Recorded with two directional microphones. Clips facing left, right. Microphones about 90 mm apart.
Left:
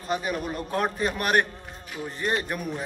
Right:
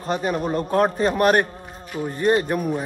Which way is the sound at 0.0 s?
40° right (ahead or behind).